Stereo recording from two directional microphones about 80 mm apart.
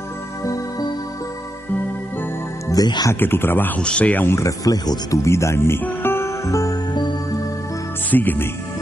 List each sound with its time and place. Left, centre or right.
0.4 s music: left
2.7 s speech: left
3.1 s speech: left
4.4 s speech: left
6.9 s music: left
8.1 s speech: left